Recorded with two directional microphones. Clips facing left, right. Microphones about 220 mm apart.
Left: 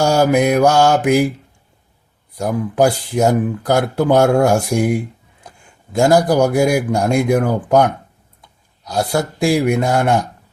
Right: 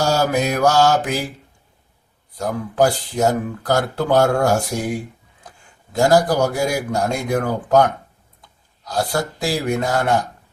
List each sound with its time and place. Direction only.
0.0 s speech: 15° left (ahead or behind)
2.4 s speech: 10° left (ahead or behind)
6.0 s speech: 20° left (ahead or behind)
9.5 s speech: 15° left (ahead or behind)